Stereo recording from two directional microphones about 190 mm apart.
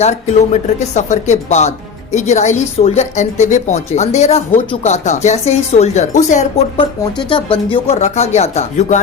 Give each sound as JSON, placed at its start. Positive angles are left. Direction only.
{"t": 0.5, "sound": "a woman's voice", "side_deg": 40}
{"t": 6.7, "sound": "a woman's voice", "side_deg": 25}